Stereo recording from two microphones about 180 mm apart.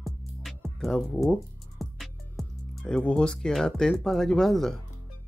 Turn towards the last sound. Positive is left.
turn(degrees=0)  # may be behind; listen again after turning